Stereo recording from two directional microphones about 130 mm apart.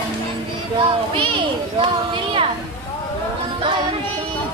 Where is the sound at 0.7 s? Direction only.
40° right (ahead or behind).